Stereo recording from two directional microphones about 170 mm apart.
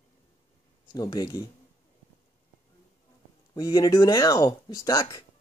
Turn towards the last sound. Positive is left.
turn(degrees=20)  # may be behind; listen again after turning